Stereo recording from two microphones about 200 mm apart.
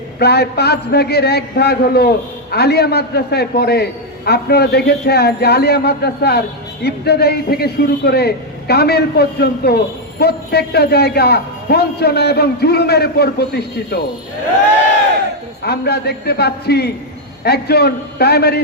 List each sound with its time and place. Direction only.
0.2 s a man's voice: 55° left (ahead or behind)
15.6 s a man's voice: 55° left (ahead or behind)